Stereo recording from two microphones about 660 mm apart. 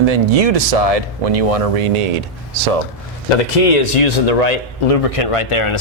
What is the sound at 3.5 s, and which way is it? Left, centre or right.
Speech, left.